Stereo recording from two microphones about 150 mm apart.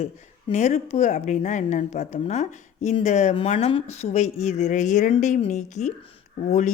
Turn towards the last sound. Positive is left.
turn(degrees=50)  # may be behind; listen again after turning